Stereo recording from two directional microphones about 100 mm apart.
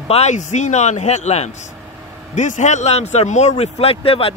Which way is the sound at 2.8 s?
90° left.